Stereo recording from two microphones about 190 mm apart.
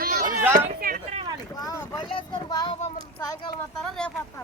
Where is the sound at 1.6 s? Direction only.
20° left (ahead or behind).